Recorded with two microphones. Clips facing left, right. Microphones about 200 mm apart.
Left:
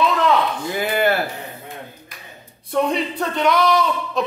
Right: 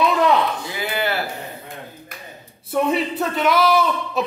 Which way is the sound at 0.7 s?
50° left (ahead or behind).